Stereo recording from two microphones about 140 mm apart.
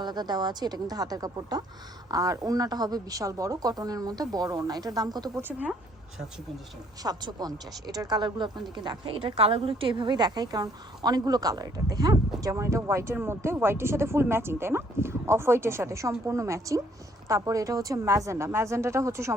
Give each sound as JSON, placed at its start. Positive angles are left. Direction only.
{"t": 0.0, "sound": "a woman's voice", "side_deg": -30}
{"t": 5.4, "sound": "speech", "side_deg": -10}
{"t": 7.0, "sound": "a woman's voice", "side_deg": -30}